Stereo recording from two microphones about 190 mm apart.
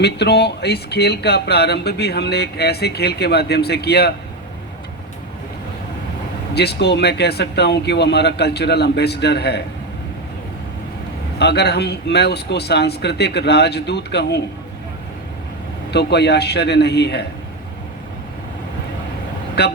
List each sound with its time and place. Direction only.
0.0 s speech: 60° left (ahead or behind)
6.5 s speech: 60° left (ahead or behind)
11.3 s speech: 60° left (ahead or behind)
15.9 s speech: 60° left (ahead or behind)
19.6 s speech: 60° left (ahead or behind)